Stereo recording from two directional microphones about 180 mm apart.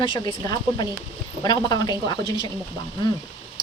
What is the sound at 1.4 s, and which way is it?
A woman's voice, 20° left (ahead or behind).